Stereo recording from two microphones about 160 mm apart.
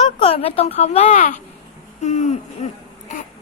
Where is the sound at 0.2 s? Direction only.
40° left (ahead or behind).